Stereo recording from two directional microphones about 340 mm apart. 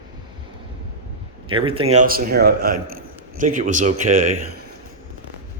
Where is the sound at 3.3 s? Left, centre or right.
Right.